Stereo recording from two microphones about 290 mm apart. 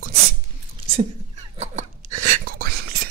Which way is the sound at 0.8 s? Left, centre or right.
Centre.